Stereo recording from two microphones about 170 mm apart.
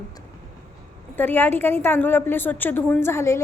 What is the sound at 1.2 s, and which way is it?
A woman's voice, 10° left (ahead or behind).